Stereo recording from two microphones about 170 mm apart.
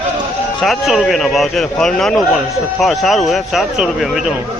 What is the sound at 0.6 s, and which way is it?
A man's voice, centre (ahead or behind).